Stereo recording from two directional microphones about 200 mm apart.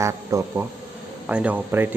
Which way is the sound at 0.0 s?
15° right (ahead or behind).